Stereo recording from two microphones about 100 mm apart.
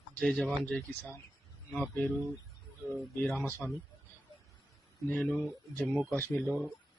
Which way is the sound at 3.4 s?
20° left (ahead or behind).